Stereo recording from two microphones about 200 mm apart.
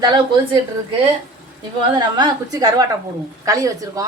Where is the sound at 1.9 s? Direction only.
20° right (ahead or behind).